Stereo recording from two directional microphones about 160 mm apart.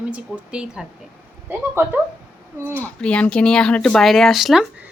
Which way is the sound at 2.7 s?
10° left (ahead or behind).